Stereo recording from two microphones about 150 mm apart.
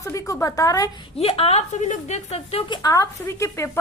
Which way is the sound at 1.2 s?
40° left (ahead or behind).